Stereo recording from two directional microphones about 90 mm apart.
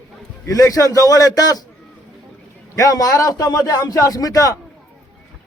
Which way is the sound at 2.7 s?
40° left (ahead or behind).